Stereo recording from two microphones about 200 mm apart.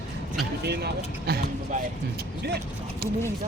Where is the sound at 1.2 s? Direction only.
45° right (ahead or behind).